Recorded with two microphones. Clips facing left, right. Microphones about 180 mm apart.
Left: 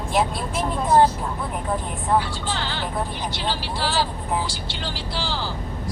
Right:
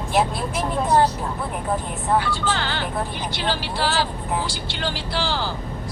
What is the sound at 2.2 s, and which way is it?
Speech, 65° right (ahead or behind).